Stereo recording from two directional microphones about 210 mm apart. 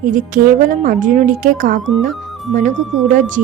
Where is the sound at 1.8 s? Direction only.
Centre (ahead or behind).